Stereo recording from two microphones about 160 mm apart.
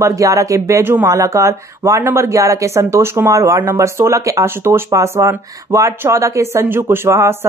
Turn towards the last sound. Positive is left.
turn(degrees=-15)  # may be behind; listen again after turning